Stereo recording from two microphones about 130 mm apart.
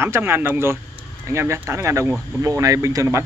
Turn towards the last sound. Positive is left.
turn(degrees=-25)  # may be behind; listen again after turning